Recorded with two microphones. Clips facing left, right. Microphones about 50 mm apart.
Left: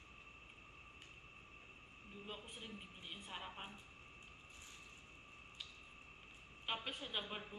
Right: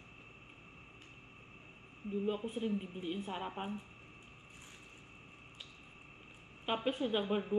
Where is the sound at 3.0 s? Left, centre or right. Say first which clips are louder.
Right 11 dB; right.